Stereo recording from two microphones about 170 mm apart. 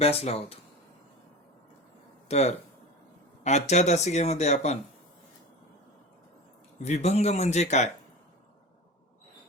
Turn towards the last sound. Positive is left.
turn(degrees=40)  # may be behind; listen again after turning